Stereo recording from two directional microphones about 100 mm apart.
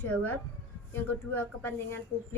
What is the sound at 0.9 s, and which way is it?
Speech, 20° left (ahead or behind).